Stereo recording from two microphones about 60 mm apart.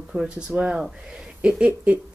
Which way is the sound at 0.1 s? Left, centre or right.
Right.